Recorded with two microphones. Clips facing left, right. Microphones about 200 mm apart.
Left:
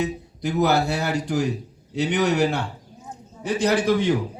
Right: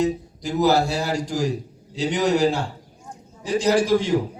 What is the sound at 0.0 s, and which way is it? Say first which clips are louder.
A man's voice: right 3 dB; 60° left (ahead or behind).